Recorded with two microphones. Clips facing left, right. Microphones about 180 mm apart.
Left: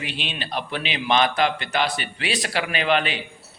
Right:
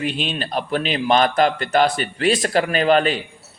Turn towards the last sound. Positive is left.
turn(degrees=-40)  # may be behind; listen again after turning